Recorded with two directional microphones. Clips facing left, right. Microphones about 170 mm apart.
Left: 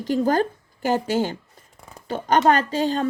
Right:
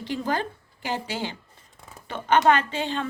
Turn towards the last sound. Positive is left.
turn(degrees=40)  # may be behind; listen again after turning